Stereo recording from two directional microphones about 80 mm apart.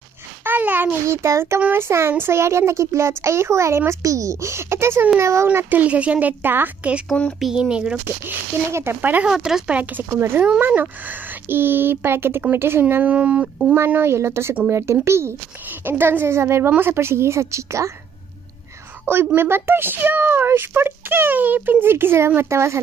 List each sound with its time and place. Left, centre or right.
0.5 s a sound: right
1.0 s speech: right
7.3 s speech: centre
8.3 s speech: right
9.3 s speech: centre; by 13.0 s right
13.0 s speech: centre
13.7 s speech: right
19.0 s speech: right